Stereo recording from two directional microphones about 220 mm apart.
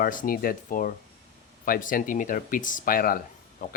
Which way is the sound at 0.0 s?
40° left (ahead or behind).